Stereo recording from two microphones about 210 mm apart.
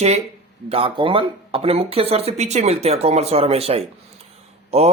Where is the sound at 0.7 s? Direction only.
25° right (ahead or behind).